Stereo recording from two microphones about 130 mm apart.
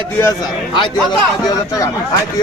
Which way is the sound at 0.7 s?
35° left (ahead or behind).